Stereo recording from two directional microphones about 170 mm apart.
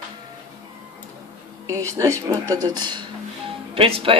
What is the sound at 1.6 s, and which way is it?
Speech, 15° right (ahead or behind).